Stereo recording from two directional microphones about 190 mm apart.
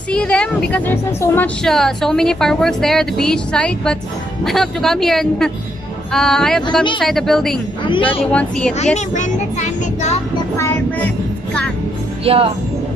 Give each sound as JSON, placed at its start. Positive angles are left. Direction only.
{"t": 0.1, "sound": "speech", "side_deg": 5}
{"t": 7.8, "sound": "speech", "side_deg": 25}
{"t": 8.3, "sound": "speech", "side_deg": 5}
{"t": 8.7, "sound": "a child's voice", "side_deg": 35}
{"t": 10.6, "sound": "music", "side_deg": 10}
{"t": 12.3, "sound": "speech", "side_deg": -30}